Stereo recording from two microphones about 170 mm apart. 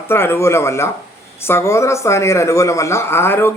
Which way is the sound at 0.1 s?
15° left (ahead or behind).